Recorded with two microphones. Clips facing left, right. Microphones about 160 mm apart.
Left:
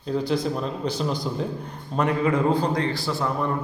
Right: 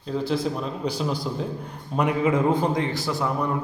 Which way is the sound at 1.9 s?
15° right (ahead or behind).